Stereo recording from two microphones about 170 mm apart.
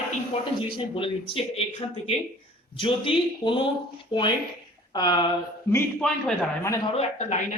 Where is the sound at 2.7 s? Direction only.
30° left (ahead or behind).